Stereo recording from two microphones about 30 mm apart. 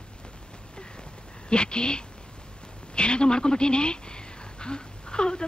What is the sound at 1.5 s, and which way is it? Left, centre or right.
A woman's voice, left.